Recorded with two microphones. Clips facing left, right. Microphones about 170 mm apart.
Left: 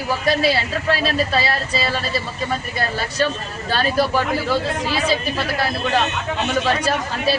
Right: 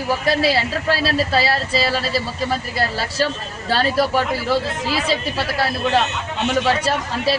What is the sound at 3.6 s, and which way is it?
Speech, 30° right (ahead or behind).